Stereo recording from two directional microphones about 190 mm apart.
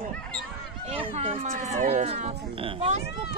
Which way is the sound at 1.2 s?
30° right (ahead or behind).